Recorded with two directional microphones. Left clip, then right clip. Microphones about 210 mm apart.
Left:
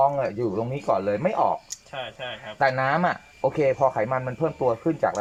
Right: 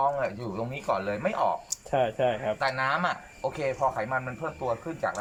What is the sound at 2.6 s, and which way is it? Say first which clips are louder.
Speech: left 8 dB; 40° left (ahead or behind).